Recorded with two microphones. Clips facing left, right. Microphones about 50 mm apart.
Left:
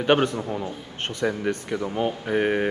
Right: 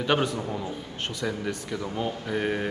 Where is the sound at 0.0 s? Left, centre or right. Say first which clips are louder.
Left 5 dB; left.